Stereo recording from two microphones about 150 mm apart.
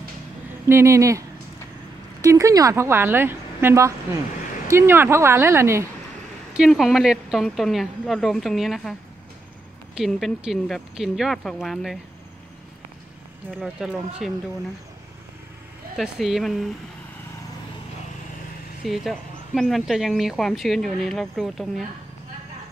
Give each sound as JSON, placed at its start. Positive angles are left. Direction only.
{"t": 0.7, "sound": "speech", "side_deg": -20}
{"t": 2.2, "sound": "speech", "side_deg": -20}
{"t": 6.5, "sound": "speech", "side_deg": 0}
{"t": 9.9, "sound": "speech", "side_deg": 0}
{"t": 13.5, "sound": "speech", "side_deg": -5}
{"t": 16.0, "sound": "speech", "side_deg": -5}
{"t": 18.9, "sound": "speech", "side_deg": 0}